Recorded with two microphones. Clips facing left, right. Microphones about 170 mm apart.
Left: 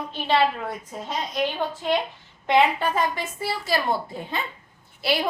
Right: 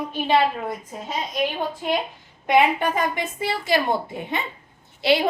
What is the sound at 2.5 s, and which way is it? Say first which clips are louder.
A woman's voice: right 1 dB; 15° right (ahead or behind).